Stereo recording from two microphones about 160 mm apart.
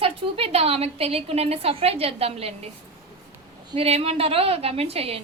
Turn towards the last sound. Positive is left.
turn(degrees=-40)  # may be behind; listen again after turning